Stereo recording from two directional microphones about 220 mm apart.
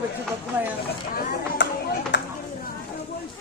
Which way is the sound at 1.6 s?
55° left (ahead or behind).